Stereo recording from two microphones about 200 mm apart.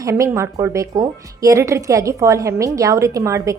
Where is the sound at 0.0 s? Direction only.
15° right (ahead or behind).